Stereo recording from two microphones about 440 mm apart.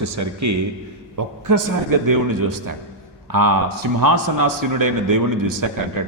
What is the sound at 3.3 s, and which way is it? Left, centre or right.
A man's voice, right.